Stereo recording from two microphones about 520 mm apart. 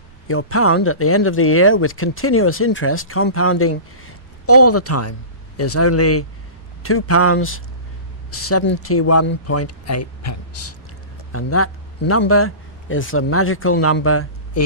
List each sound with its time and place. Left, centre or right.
0.3 s a man's voice: left